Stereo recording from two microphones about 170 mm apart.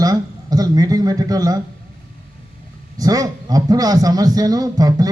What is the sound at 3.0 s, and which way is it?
A man's voice, 20° right (ahead or behind).